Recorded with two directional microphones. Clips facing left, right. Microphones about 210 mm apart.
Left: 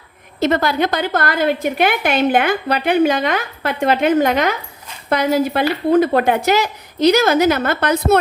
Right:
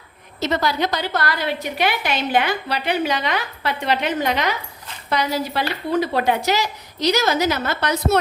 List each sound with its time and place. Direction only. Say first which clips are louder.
0.3 s a woman's voice: left 5 dB; 55° left (ahead or behind)